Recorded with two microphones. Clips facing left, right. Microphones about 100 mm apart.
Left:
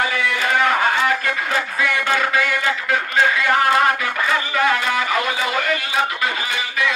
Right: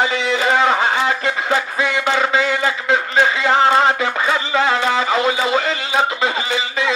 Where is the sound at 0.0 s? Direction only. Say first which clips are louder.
Right 3 dB; 20° right (ahead or behind).